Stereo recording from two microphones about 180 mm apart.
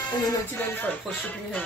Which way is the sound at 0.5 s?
10° left (ahead or behind).